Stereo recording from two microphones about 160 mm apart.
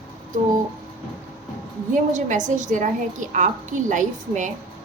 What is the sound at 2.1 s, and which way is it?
A woman's voice, 50° right (ahead or behind).